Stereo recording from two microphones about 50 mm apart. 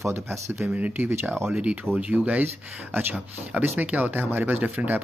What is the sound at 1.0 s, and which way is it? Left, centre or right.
Speech, right.